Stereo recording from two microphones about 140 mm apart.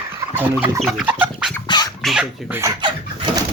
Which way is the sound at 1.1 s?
10° right (ahead or behind).